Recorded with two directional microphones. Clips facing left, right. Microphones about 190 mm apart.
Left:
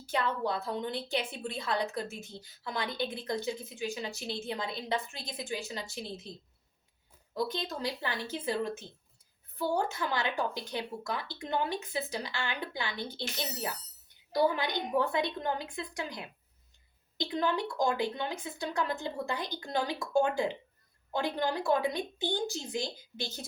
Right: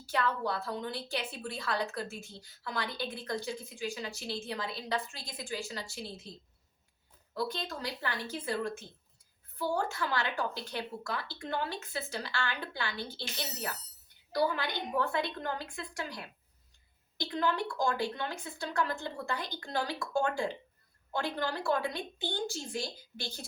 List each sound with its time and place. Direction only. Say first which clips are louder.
0.0 s a woman's voice: left 1 dB; 20° left (ahead or behind)
7.3 s a woman's voice: left 2 dB; 20° left (ahead or behind)